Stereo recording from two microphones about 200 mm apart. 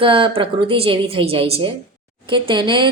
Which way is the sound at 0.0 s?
25° right (ahead or behind).